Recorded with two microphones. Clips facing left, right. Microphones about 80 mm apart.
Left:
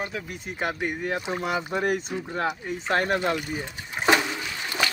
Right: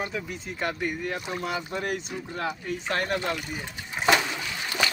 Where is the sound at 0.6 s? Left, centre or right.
Centre.